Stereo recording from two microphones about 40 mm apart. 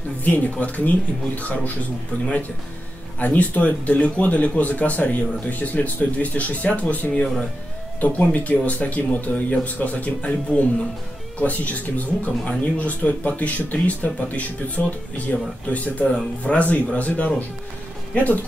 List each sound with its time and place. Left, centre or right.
0.2 s speech: left
3.2 s speech: left
8.0 s speech: left